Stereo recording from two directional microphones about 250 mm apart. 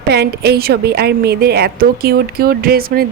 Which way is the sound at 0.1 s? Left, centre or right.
Right.